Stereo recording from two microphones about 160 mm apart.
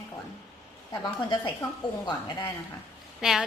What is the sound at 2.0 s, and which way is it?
Speech, 30° left (ahead or behind).